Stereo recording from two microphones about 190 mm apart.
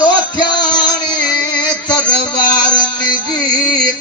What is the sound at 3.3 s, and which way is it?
Music, 20° left (ahead or behind).